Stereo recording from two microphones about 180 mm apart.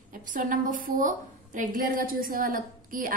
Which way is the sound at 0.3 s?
45° right (ahead or behind).